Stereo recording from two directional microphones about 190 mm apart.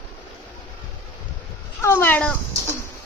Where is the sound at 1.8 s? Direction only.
10° left (ahead or behind).